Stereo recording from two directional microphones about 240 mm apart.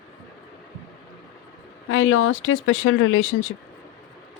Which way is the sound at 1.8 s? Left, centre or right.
Left.